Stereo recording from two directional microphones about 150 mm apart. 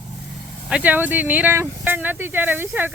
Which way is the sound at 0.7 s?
10° right (ahead or behind).